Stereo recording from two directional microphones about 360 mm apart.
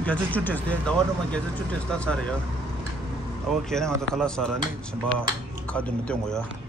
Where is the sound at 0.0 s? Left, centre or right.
Centre.